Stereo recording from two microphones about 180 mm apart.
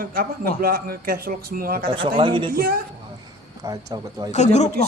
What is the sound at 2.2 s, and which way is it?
Speech, 30° right (ahead or behind).